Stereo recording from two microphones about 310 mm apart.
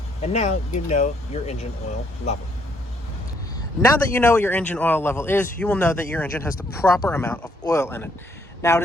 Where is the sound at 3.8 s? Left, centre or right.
Centre.